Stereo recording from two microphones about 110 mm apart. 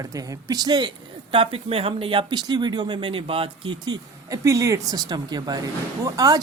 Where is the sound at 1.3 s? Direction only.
55° right (ahead or behind).